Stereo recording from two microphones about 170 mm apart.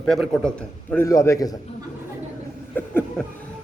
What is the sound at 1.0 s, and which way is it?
Speech, 20° left (ahead or behind).